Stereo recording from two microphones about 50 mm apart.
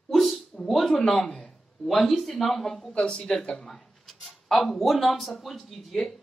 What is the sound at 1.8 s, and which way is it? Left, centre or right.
Speech, centre.